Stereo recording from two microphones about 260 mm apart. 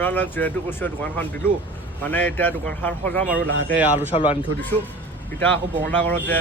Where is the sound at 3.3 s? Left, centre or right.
Right.